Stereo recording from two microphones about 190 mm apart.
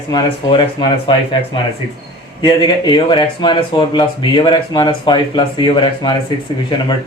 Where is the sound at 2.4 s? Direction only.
25° left (ahead or behind).